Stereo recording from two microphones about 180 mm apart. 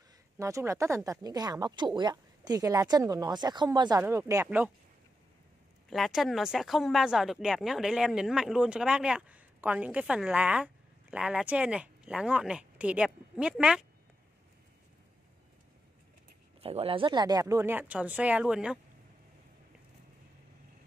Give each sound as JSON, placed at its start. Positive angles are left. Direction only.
{"t": 0.4, "sound": "speech", "side_deg": -15}
{"t": 5.9, "sound": "speech", "side_deg": 0}
{"t": 16.6, "sound": "speech", "side_deg": -30}